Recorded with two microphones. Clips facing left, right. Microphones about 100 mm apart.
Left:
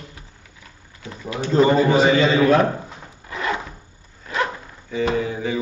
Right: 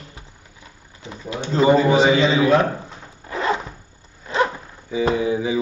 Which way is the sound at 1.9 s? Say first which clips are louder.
Even; 15° right (ahead or behind).